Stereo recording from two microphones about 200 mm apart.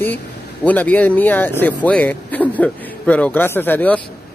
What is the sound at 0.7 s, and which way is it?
Speech, 10° left (ahead or behind).